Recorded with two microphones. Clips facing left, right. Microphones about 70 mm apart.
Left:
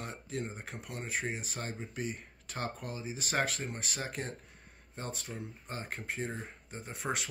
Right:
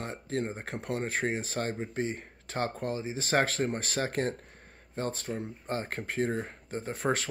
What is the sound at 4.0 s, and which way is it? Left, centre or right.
Speech, right.